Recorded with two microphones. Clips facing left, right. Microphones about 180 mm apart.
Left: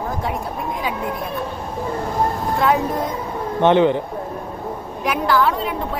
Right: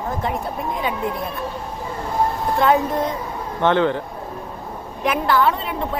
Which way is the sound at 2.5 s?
Centre (ahead or behind).